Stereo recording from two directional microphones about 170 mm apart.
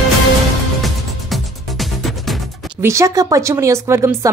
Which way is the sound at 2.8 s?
15° right (ahead or behind).